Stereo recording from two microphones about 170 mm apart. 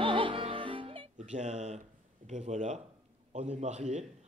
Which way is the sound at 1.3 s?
45° right (ahead or behind).